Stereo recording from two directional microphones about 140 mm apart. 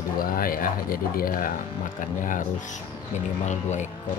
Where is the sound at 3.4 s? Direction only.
55° left (ahead or behind).